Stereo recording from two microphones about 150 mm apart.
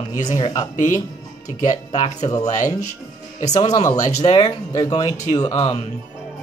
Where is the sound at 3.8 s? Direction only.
25° left (ahead or behind).